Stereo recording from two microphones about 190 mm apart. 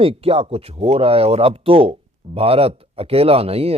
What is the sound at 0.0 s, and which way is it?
Speech, 30° right (ahead or behind).